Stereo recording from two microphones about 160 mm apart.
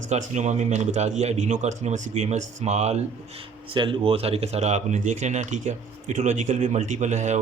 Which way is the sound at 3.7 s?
35° right (ahead or behind).